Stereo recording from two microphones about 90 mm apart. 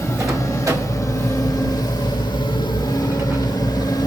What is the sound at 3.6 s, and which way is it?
Vehicle, 45° left (ahead or behind).